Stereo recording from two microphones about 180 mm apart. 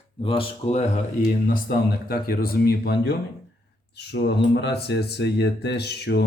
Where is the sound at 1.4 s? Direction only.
60° left (ahead or behind).